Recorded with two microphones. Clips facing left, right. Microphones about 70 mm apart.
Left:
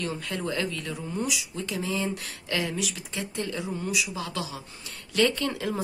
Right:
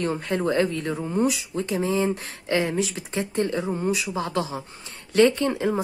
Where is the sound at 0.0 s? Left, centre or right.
Right.